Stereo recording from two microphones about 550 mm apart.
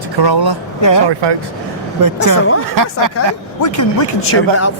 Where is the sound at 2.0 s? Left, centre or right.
Right.